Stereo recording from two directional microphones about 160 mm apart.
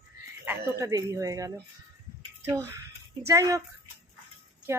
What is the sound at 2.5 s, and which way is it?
Speech, 20° right (ahead or behind).